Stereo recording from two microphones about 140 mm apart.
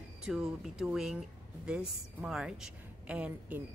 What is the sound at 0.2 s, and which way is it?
A woman's voice, 5° right (ahead or behind).